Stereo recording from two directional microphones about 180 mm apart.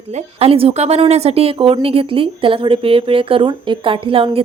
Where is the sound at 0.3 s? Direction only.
30° right (ahead or behind).